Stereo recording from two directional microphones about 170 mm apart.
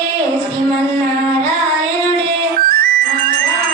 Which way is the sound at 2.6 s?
65° right (ahead or behind).